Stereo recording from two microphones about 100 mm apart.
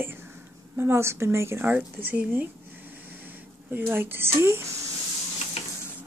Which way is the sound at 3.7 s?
20° right (ahead or behind).